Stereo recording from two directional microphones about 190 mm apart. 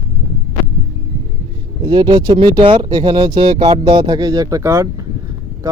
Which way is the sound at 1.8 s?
25° right (ahead or behind).